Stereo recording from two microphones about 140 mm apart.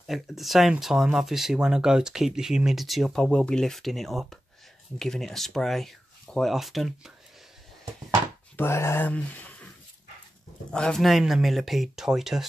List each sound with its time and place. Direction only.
0.0 s speech: centre (ahead or behind)
8.5 s speech: 20° left (ahead or behind)
10.7 s speech: 5° left (ahead or behind)